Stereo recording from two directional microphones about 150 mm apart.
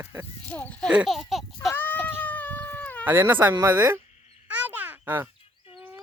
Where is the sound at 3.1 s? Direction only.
15° right (ahead or behind).